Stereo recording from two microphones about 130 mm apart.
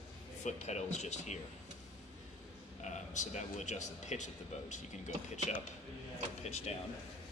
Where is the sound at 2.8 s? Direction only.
65° left (ahead or behind).